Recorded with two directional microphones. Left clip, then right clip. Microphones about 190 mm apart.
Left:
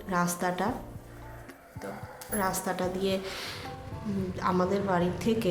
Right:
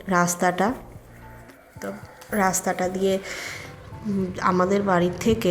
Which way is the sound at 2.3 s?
35° right (ahead or behind).